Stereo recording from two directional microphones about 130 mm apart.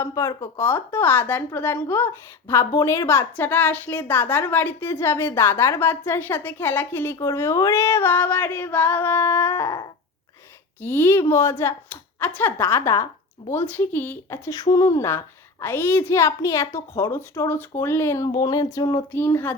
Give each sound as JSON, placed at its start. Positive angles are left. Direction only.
{"t": 0.0, "sound": "a woman's voice", "side_deg": 25}
{"t": 19.1, "sound": "speech", "side_deg": 15}